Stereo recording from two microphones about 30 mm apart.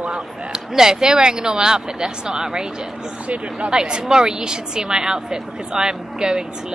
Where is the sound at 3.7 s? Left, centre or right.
Right.